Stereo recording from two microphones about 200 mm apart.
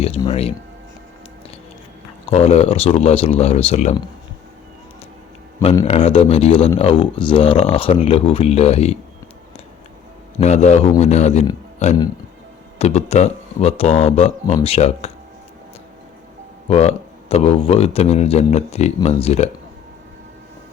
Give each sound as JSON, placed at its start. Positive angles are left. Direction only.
{"t": 0.3, "sound": "speech", "side_deg": 30}
{"t": 2.3, "sound": "speech", "side_deg": 30}
{"t": 5.8, "sound": "speech", "side_deg": 30}
{"t": 10.4, "sound": "speech", "side_deg": 35}
{"t": 16.6, "sound": "speech", "side_deg": 30}